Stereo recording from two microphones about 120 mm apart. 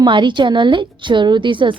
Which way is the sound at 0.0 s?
40° right (ahead or behind).